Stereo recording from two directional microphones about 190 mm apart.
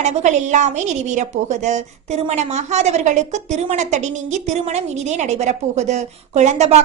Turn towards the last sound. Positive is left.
turn(degrees=-35)  # may be behind; listen again after turning